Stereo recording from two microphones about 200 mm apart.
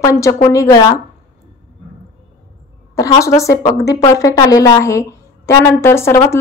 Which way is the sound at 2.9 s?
15° left (ahead or behind).